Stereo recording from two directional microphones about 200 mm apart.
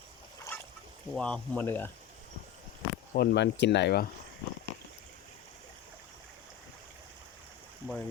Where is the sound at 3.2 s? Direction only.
55° left (ahead or behind).